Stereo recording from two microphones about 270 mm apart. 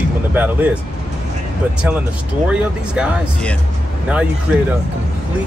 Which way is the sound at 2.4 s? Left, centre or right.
Centre.